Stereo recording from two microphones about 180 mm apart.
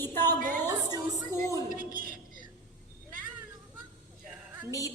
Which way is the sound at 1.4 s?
20° left (ahead or behind).